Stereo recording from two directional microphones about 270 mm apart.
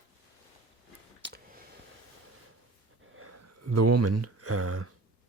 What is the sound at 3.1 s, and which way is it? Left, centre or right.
Speech, right.